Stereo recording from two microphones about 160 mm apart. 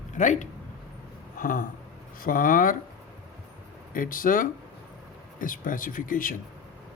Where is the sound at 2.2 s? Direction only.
60° left (ahead or behind).